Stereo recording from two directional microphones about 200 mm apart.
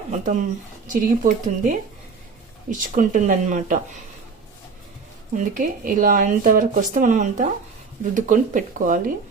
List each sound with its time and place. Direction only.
0.1 s speech: 40° right (ahead or behind)
2.9 s speech: 40° right (ahead or behind)
5.3 s speech: 40° right (ahead or behind)